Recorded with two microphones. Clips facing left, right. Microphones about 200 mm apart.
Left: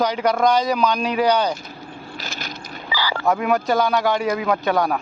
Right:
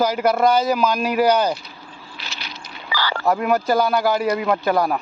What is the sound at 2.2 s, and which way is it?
Vehicle, 45° left (ahead or behind).